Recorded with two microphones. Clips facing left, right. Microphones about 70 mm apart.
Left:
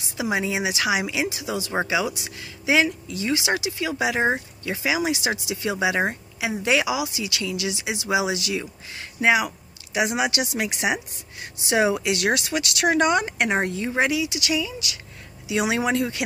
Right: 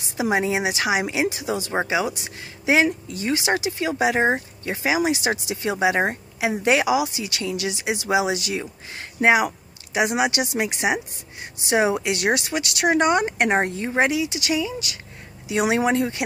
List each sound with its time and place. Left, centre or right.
0.2 s speech: right
1.7 s speech: right
2.0 s speech: right
9.9 s speech: right